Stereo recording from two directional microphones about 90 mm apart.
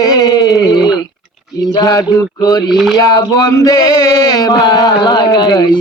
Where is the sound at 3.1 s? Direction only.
45° left (ahead or behind).